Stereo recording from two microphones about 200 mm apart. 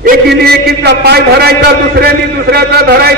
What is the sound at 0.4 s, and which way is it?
A man's voice, 55° right (ahead or behind).